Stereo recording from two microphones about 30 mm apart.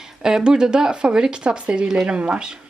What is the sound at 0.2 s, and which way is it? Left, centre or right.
Speech, right.